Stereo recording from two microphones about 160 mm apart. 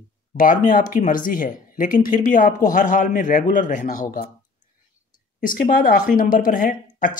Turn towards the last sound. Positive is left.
turn(degrees=55)  # may be behind; listen again after turning